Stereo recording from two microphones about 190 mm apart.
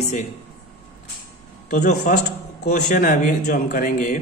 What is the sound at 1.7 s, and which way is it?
A man's voice, 45° left (ahead or behind).